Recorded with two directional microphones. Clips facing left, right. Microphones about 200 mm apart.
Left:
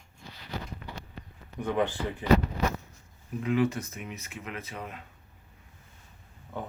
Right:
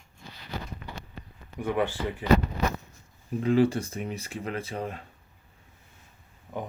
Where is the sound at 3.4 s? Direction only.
30° right (ahead or behind).